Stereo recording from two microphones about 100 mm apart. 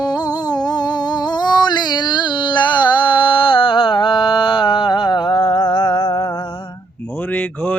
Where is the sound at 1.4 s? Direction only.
45° left (ahead or behind).